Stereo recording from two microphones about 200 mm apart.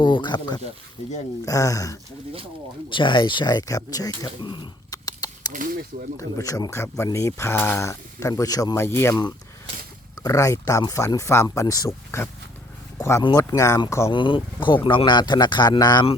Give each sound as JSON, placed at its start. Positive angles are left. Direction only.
{"t": 0.0, "sound": "speech", "side_deg": 25}
{"t": 5.5, "sound": "speech", "side_deg": -40}
{"t": 6.1, "sound": "speech", "side_deg": 15}